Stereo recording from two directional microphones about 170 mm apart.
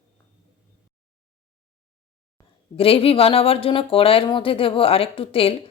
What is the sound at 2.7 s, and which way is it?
Speech, 35° left (ahead or behind).